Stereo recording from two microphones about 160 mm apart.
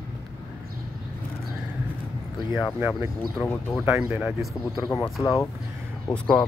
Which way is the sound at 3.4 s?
20° left (ahead or behind).